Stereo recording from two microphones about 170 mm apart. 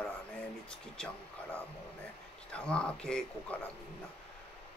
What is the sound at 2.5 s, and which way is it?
Speech, 5° left (ahead or behind).